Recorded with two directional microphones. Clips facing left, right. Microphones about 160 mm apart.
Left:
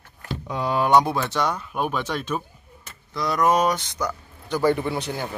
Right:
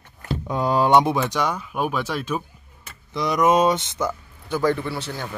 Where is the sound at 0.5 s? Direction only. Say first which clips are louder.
Right 3 dB; 45° right (ahead or behind).